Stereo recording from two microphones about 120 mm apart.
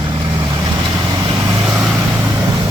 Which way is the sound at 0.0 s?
40° right (ahead or behind).